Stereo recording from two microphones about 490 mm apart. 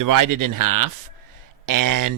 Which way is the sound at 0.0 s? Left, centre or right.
Right.